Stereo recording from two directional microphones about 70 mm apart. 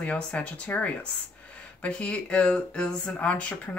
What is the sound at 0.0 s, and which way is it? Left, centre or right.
Speech, centre.